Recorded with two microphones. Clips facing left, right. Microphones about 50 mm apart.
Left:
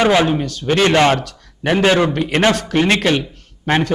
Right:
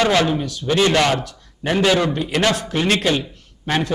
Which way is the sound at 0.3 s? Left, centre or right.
Left.